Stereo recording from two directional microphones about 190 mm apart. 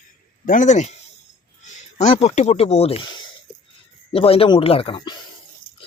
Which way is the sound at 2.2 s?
35° left (ahead or behind).